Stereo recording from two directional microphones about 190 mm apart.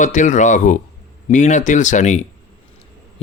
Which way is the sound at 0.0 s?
40° left (ahead or behind).